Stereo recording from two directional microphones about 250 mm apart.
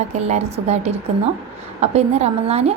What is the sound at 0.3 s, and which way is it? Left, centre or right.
Speech, right.